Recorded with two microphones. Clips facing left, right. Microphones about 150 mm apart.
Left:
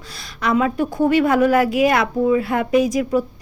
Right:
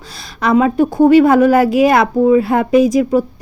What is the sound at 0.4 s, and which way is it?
Speech, 30° right (ahead or behind).